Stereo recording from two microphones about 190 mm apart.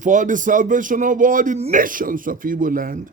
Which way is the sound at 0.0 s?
40° right (ahead or behind).